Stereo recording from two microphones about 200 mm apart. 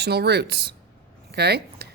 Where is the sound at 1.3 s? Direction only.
55° right (ahead or behind).